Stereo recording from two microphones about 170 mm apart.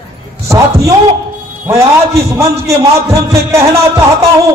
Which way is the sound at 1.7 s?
15° right (ahead or behind).